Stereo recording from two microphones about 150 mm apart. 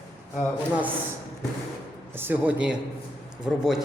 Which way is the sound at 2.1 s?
15° right (ahead or behind).